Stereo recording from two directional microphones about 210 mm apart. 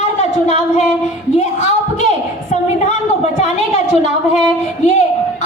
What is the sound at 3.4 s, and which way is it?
A woman's voice, 35° left (ahead or behind).